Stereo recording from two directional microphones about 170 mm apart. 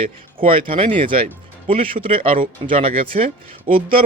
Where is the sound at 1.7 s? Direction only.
30° right (ahead or behind).